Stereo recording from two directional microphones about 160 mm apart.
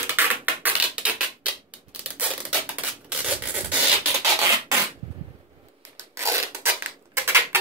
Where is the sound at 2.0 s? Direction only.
10° right (ahead or behind).